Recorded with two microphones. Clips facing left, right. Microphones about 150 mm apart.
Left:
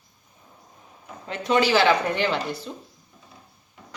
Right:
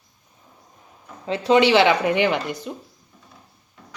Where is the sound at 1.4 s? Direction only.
25° right (ahead or behind).